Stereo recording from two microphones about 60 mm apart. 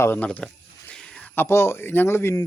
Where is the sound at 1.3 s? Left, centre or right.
Left.